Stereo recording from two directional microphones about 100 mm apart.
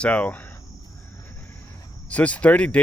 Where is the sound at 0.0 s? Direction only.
15° left (ahead or behind).